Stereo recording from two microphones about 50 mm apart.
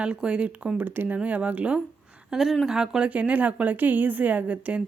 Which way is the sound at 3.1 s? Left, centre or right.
Right.